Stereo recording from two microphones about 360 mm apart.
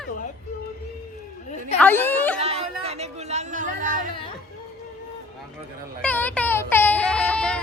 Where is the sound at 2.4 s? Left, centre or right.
Centre.